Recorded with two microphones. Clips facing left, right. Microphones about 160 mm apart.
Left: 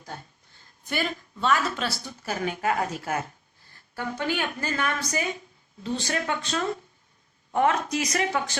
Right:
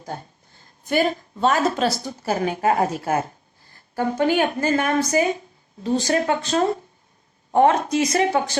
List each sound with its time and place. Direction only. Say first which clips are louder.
0.0 s a woman's voice: right 7 dB; 40° right (ahead or behind)